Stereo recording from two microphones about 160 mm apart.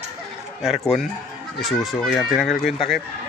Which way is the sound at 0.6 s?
Centre (ahead or behind).